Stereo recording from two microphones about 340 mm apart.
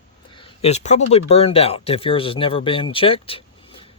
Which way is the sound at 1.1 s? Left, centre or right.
Centre.